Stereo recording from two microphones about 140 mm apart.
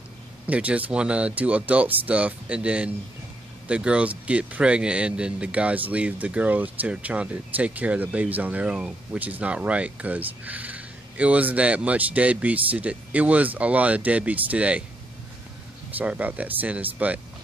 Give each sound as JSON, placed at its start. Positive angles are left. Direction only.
{"t": 0.5, "sound": "speech", "side_deg": -10}
{"t": 15.9, "sound": "speech", "side_deg": -10}